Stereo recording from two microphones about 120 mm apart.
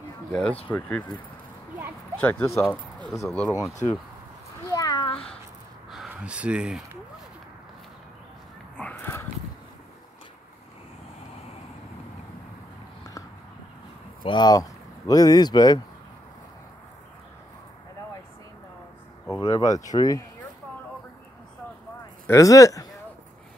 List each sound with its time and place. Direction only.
0.3 s speech: 5° left (ahead or behind)
2.1 s speech: 15° left (ahead or behind)
2.4 s speech: 25° left (ahead or behind)
3.3 s speech: 5° left (ahead or behind)
4.6 s a sound: 30° left (ahead or behind)
6.0 s speech: 10° right (ahead or behind)
8.7 s a sound: 15° left (ahead or behind)
14.2 s speech: 40° left (ahead or behind)
19.2 s speech: 25° left (ahead or behind)
22.2 s speech: 25° left (ahead or behind)